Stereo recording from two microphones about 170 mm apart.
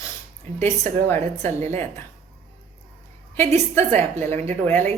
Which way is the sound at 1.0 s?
15° left (ahead or behind).